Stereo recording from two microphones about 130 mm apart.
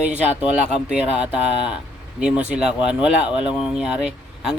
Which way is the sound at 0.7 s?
5° right (ahead or behind).